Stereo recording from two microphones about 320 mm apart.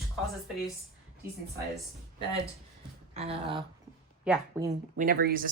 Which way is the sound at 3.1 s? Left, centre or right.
Centre.